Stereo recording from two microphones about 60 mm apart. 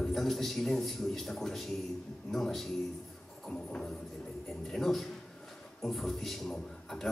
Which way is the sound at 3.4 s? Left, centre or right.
Centre.